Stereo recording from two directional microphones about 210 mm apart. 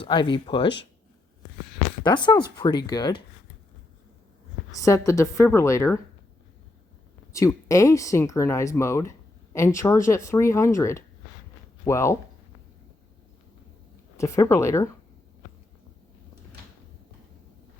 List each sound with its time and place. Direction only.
0.0 s speech: 20° left (ahead or behind)
2.0 s speech: 20° left (ahead or behind)
4.7 s speech: 15° left (ahead or behind)
7.3 s speech: 15° left (ahead or behind)
14.2 s speech: 15° left (ahead or behind)